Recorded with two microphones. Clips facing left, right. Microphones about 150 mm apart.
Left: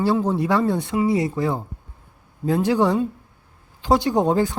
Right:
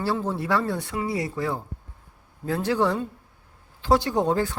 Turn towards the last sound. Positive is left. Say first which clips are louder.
# left 4 dB
turn(degrees=15)  # may be behind; listen again after turning